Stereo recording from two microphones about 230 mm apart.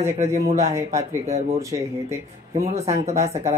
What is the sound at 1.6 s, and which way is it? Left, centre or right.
Speech, centre.